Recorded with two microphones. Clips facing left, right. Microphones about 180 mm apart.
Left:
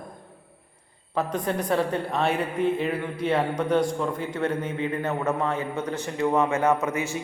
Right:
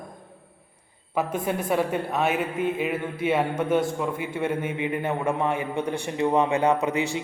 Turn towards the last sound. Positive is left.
turn(degrees=-15)  # may be behind; listen again after turning